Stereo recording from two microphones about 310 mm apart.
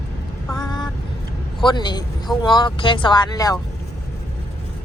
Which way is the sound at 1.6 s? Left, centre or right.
Centre.